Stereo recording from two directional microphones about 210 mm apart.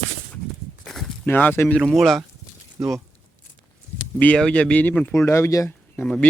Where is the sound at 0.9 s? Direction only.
Centre (ahead or behind).